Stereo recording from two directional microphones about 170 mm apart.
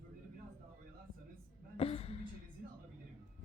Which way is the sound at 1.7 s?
35° left (ahead or behind).